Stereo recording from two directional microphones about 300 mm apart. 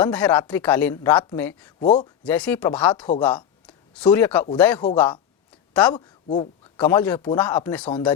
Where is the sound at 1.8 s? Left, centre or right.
Left.